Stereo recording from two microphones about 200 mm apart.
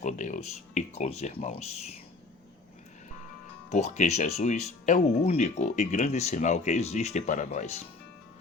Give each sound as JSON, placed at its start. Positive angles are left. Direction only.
{"t": 0.0, "sound": "speech", "side_deg": 35}
{"t": 3.7, "sound": "speech", "side_deg": 35}